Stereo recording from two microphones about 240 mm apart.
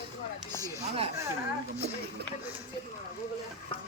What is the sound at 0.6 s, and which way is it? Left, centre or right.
Speech, centre.